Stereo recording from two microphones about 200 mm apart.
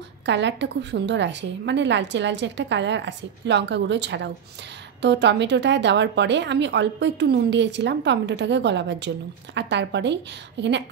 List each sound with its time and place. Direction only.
0.3 s speech: 60° right (ahead or behind)